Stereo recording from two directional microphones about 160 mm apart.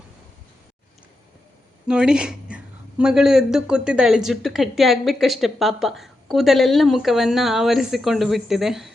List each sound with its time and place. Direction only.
1.9 s a woman's voice: 5° right (ahead or behind)